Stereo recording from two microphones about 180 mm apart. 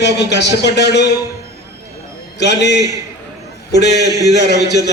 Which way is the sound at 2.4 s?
70° left (ahead or behind).